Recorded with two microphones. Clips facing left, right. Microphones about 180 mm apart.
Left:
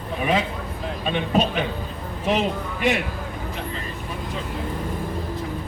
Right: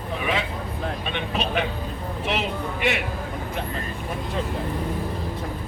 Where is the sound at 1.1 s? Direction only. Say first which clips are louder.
Left 6 dB; 40° left (ahead or behind).